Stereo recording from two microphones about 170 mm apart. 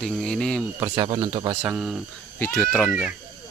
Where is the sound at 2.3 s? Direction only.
10° left (ahead or behind).